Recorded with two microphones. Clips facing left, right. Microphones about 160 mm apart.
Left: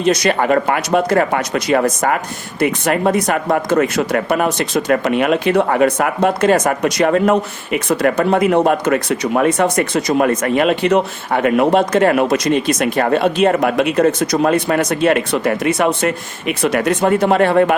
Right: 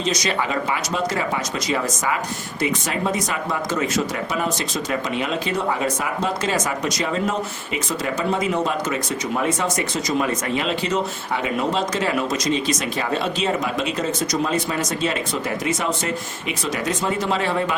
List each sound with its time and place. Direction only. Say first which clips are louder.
0.0 s speech: left 8 dB; 60° left (ahead or behind)